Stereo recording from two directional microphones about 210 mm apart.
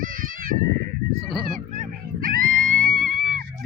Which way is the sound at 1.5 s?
40° right (ahead or behind).